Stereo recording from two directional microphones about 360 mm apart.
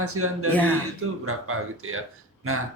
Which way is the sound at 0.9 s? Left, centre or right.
Right.